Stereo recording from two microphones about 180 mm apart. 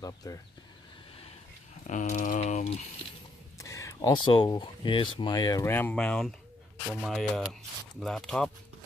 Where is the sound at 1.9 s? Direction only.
45° left (ahead or behind).